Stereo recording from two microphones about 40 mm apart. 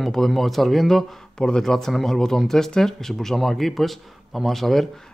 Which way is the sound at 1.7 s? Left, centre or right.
Centre.